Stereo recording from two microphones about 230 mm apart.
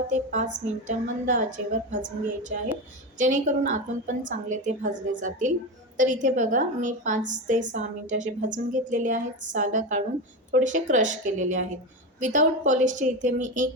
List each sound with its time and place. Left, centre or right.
0.1 s a woman's voice: right
3.2 s a woman's voice: right